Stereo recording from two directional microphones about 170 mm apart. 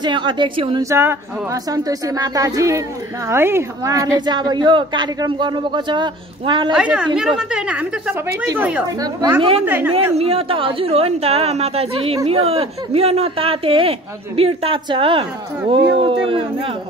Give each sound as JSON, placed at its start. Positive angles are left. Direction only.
{"t": 0.0, "sound": "a woman's voice", "side_deg": -30}
{"t": 0.8, "sound": "a woman's voice", "side_deg": -15}
{"t": 6.7, "sound": "a woman's voice", "side_deg": -5}
{"t": 9.9, "sound": "speech", "side_deg": -35}